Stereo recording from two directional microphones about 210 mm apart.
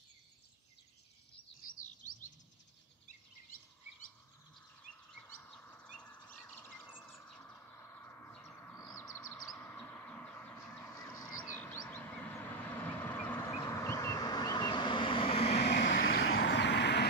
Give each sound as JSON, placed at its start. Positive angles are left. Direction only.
{"t": 5.4, "sound": "bird", "side_deg": 10}
{"t": 9.6, "sound": "a sound", "side_deg": 10}
{"t": 15.6, "sound": "vehicle", "side_deg": 55}
{"t": 16.3, "sound": "vehicle", "side_deg": 65}